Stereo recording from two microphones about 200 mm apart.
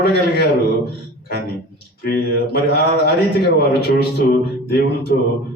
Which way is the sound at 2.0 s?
50° left (ahead or behind).